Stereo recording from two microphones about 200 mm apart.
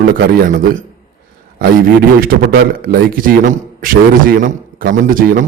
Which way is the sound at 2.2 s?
45° right (ahead or behind).